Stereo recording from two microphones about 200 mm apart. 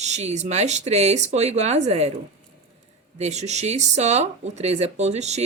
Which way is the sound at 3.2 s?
35° right (ahead or behind).